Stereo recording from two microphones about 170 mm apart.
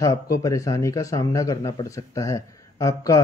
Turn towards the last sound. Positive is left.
turn(degrees=20)  # may be behind; listen again after turning